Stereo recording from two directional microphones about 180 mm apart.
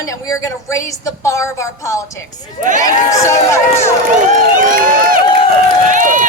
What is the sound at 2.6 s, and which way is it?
Speech, 45° right (ahead or behind).